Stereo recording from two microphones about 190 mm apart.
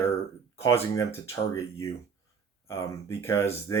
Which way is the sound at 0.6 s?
15° left (ahead or behind).